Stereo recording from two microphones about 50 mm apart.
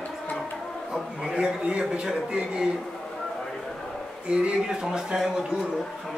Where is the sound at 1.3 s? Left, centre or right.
Right.